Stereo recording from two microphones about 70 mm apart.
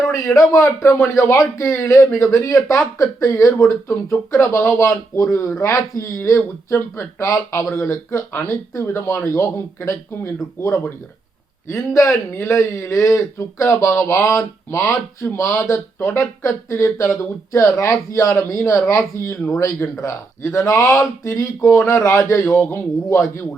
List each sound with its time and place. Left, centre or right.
0.1 s a man's voice: left
5.5 s speech: left
12.4 s speech: left
17.6 s speech: left